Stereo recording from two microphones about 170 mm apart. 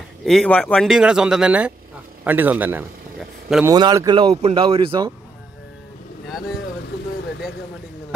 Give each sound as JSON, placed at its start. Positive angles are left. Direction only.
{"t": 0.2, "sound": "a man's voice", "side_deg": 0}
{"t": 3.6, "sound": "speech", "side_deg": -25}